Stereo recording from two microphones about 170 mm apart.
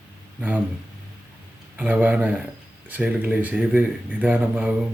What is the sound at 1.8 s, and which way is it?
Speech, 10° right (ahead or behind).